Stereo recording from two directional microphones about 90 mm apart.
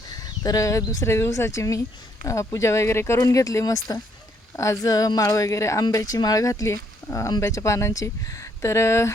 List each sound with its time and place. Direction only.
0.1 s speech: 45° left (ahead or behind)